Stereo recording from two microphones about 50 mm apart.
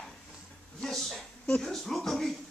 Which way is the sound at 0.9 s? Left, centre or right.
Centre.